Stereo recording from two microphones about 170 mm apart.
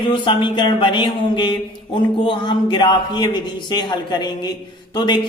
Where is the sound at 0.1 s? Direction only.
30° left (ahead or behind).